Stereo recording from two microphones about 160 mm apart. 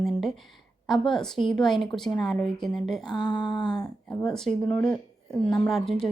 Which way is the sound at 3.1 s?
25° left (ahead or behind).